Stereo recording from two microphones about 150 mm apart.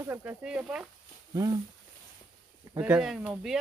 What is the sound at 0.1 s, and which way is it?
Speech, 10° right (ahead or behind).